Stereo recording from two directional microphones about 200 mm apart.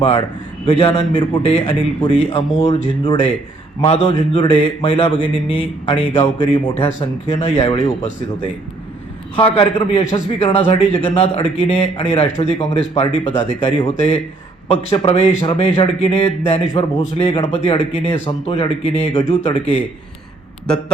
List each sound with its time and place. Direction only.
0.6 s speech: 25° left (ahead or behind)
9.3 s speech: 25° left (ahead or behind)